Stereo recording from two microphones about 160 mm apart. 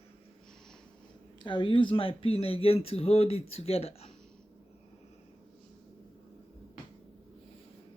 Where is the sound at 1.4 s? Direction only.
30° left (ahead or behind).